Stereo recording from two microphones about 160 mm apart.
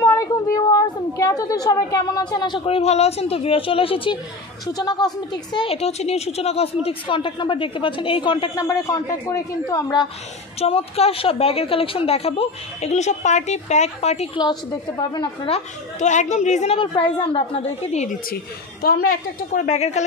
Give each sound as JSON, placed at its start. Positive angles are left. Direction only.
{"t": 0.0, "sound": "a woman's voice", "side_deg": 20}
{"t": 10.6, "sound": "a woman's voice", "side_deg": 40}
{"t": 14.4, "sound": "a woman's voice", "side_deg": 25}
{"t": 16.7, "sound": "a woman's voice", "side_deg": 30}
{"t": 18.3, "sound": "a woman's voice", "side_deg": 75}